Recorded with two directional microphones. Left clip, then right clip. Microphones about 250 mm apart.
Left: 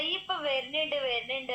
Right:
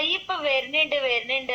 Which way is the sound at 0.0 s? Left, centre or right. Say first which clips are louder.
Right 6 dB; right.